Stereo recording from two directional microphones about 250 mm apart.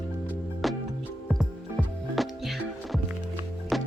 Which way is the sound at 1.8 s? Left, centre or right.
Centre.